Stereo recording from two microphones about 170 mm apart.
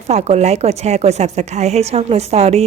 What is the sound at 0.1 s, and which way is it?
A woman's voice, 40° right (ahead or behind).